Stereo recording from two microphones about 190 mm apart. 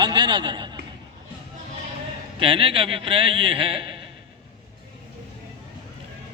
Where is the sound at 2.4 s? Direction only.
25° right (ahead or behind).